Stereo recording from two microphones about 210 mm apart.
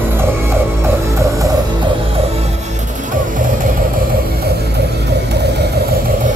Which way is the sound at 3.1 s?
40° right (ahead or behind).